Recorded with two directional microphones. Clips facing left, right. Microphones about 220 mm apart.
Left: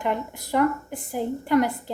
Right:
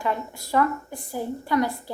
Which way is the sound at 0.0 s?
20° left (ahead or behind).